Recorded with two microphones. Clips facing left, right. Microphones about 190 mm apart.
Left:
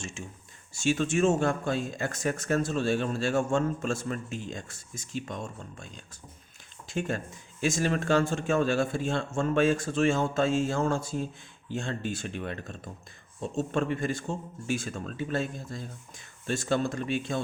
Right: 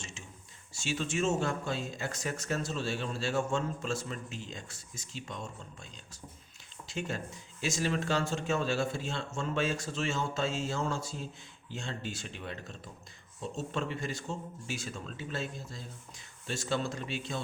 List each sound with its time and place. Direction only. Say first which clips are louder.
0.0 s speech: left 8 dB; 50° left (ahead or behind)